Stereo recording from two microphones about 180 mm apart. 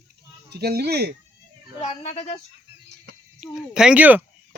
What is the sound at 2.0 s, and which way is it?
Speech, 35° left (ahead or behind).